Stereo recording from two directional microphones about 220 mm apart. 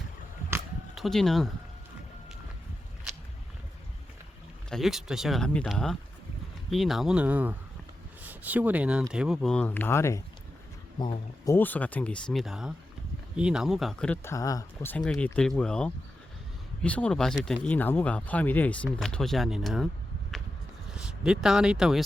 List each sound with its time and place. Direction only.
0.9 s speech: centre (ahead or behind)
4.7 s speech: centre (ahead or behind); by 11.5 s 20° left (ahead or behind)
11.5 s speech: 10° left (ahead or behind)
20.9 s speech: 5° right (ahead or behind)